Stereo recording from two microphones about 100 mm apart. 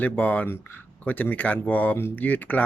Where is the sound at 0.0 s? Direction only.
15° left (ahead or behind).